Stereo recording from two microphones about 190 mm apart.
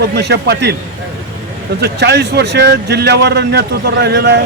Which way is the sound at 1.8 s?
60° right (ahead or behind).